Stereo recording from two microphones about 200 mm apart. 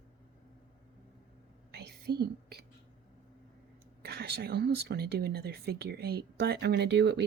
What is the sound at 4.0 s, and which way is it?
Speech, 55° right (ahead or behind).